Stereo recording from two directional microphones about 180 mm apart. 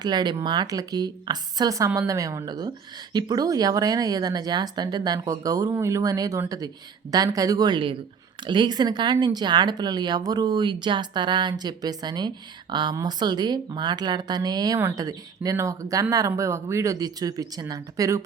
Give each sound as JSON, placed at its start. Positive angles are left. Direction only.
{"t": 0.0, "sound": "a woman's voice", "side_deg": -25}